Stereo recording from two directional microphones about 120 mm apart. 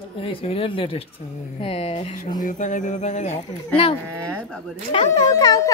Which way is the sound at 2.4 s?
90° left.